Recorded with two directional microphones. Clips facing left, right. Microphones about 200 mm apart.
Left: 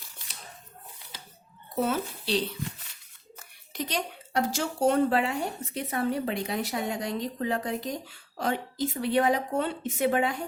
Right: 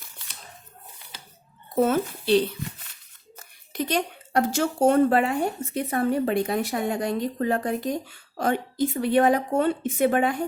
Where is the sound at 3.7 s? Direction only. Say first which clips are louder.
Right 6 dB; 55° right (ahead or behind).